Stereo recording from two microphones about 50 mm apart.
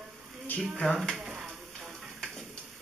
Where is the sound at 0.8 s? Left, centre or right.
Left.